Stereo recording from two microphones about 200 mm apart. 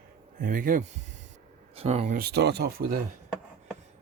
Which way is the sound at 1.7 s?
30° right (ahead or behind).